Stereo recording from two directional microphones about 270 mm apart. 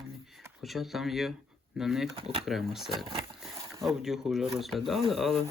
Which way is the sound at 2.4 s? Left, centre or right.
Centre.